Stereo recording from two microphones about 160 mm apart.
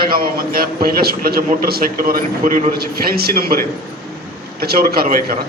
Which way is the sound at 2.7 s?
75° right (ahead or behind).